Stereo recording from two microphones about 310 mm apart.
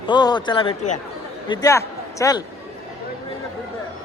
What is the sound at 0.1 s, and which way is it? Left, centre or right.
A man's voice, centre.